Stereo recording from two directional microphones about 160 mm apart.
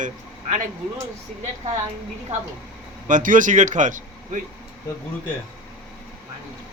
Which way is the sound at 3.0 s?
55° right (ahead or behind).